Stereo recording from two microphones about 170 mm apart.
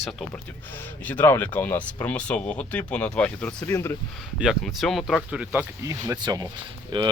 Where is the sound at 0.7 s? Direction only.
10° left (ahead or behind).